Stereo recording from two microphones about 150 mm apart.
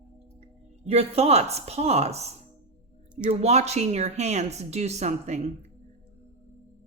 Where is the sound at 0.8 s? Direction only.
45° right (ahead or behind).